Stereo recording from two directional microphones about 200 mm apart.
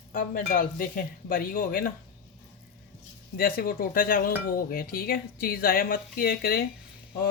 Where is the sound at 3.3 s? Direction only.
45° left (ahead or behind).